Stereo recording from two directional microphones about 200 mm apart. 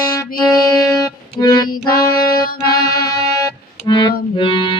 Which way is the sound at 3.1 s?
20° left (ahead or behind).